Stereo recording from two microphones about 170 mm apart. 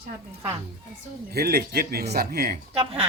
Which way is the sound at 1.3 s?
65° right (ahead or behind).